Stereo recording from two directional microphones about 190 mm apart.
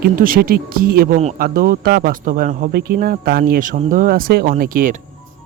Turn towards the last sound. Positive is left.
turn(degrees=-45)  # may be behind; listen again after turning